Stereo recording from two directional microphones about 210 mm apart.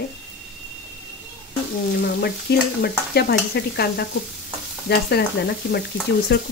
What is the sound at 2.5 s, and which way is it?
Speech, 50° left (ahead or behind).